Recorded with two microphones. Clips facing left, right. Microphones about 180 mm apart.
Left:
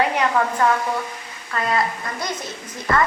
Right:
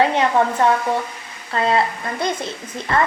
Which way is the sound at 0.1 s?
25° right (ahead or behind).